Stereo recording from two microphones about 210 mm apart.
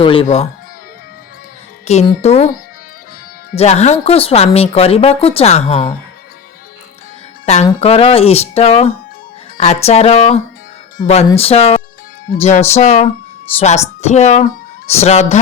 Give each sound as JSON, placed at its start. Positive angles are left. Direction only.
{"t": 0.0, "sound": "speech", "side_deg": 25}
{"t": 1.9, "sound": "speech", "side_deg": 30}
{"t": 3.5, "sound": "speech", "side_deg": 30}
{"t": 7.4, "sound": "speech", "side_deg": 30}